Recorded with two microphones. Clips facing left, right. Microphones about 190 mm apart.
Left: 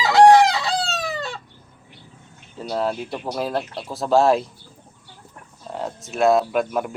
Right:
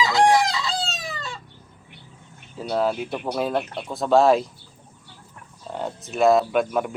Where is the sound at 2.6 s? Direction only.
Centre (ahead or behind).